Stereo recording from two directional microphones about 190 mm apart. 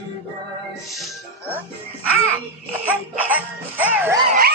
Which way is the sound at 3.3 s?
10° right (ahead or behind).